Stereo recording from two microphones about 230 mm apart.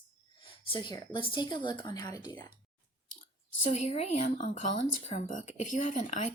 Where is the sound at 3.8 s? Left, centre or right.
Left.